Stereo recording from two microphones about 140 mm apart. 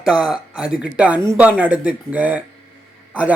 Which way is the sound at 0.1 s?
5° right (ahead or behind).